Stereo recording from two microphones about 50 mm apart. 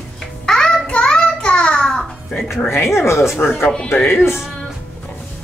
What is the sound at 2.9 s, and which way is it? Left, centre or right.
Speech, left.